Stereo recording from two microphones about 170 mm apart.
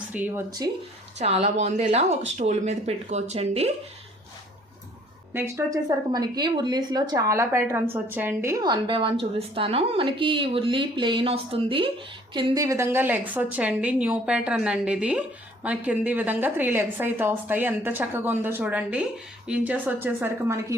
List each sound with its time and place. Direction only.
0.1 s a woman's voice: 10° right (ahead or behind)
1.2 s speech: 40° right (ahead or behind)
5.3 s a woman's voice: 15° right (ahead or behind)
6.1 s a woman's voice: 25° right (ahead or behind)